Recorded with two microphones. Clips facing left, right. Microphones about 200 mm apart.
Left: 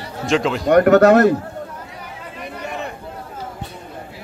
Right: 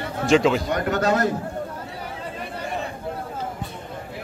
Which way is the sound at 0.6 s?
60° left (ahead or behind).